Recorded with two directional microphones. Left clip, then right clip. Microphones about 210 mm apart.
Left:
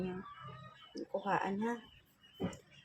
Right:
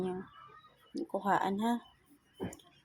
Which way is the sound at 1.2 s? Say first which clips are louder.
Right 5 dB; 35° right (ahead or behind).